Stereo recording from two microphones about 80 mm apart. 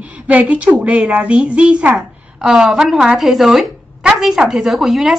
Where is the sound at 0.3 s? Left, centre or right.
Centre.